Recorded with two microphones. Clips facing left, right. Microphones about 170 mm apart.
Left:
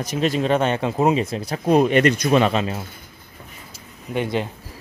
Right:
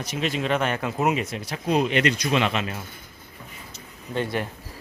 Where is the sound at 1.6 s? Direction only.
50° left (ahead or behind); by 2.8 s 30° left (ahead or behind).